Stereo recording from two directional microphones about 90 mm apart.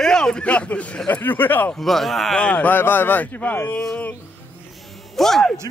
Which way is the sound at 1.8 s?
Centre (ahead or behind).